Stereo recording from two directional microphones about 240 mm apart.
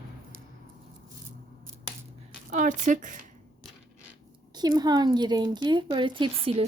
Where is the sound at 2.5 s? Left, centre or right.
Right.